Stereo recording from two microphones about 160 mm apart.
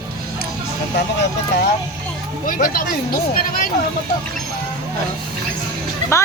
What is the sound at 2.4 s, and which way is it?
Speech, 60° left (ahead or behind).